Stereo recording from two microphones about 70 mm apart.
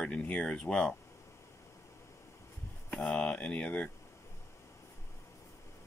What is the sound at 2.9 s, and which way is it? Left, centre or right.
Speech, centre.